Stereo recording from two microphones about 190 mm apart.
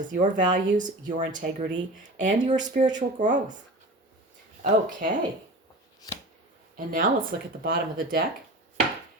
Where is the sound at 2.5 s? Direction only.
40° right (ahead or behind).